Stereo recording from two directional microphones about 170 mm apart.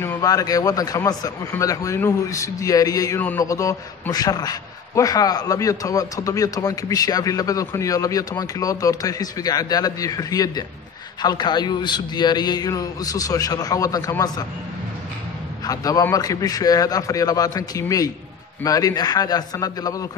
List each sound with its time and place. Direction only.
0.0 s a man's voice: 15° left (ahead or behind)
15.6 s a man's voice: 20° left (ahead or behind)